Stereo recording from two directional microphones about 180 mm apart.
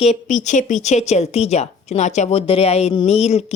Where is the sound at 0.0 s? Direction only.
40° left (ahead or behind).